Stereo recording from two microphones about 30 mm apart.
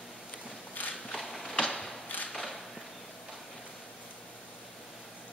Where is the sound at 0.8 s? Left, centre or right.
Left.